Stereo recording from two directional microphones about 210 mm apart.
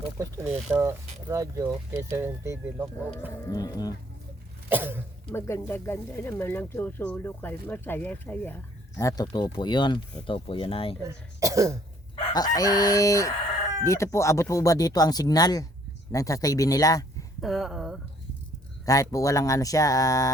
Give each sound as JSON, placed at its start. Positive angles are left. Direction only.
{"t": 0.5, "sound": "speech", "side_deg": -10}
{"t": 3.4, "sound": "speech", "side_deg": 15}
{"t": 4.7, "sound": "cough", "side_deg": -10}
{"t": 5.3, "sound": "speech", "side_deg": 10}
{"t": 11.0, "sound": "speech", "side_deg": -15}
{"t": 12.5, "sound": "speech", "side_deg": 15}
{"t": 17.4, "sound": "speech", "side_deg": 0}
{"t": 18.9, "sound": "speech", "side_deg": 15}